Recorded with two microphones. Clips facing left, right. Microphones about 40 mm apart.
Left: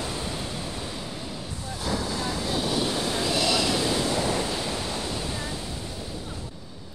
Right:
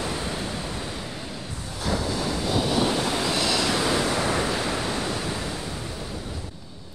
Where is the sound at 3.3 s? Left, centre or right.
Centre.